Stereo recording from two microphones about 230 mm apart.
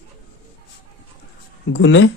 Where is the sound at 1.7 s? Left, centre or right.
Left.